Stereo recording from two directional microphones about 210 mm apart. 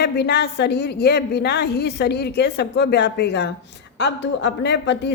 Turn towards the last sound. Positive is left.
turn(degrees=55)  # may be behind; listen again after turning